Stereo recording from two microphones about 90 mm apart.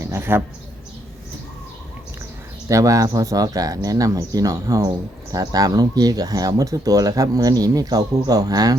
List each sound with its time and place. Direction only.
0.0 s mouse: 25° right (ahead or behind)
2.6 s speech: 40° right (ahead or behind)